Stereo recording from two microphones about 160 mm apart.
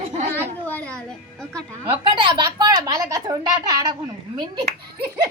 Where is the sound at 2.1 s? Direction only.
30° right (ahead or behind).